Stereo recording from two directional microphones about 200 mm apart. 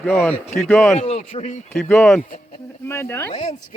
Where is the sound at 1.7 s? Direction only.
10° left (ahead or behind).